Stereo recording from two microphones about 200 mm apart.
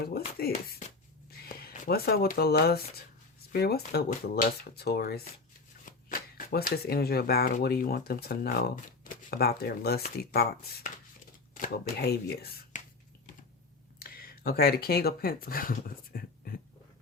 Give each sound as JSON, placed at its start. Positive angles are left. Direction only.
{"t": 0.0, "sound": "speech", "side_deg": 50}
{"t": 1.3, "sound": "a sound", "side_deg": 50}
{"t": 1.7, "sound": "speech", "side_deg": 45}
{"t": 14.0, "sound": "speech", "side_deg": 50}